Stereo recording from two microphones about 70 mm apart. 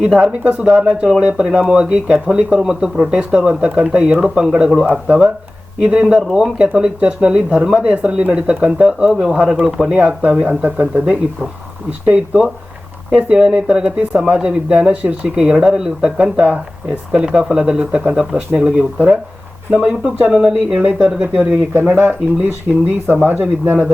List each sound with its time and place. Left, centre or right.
0.0 s speech: centre
20.7 s speech: right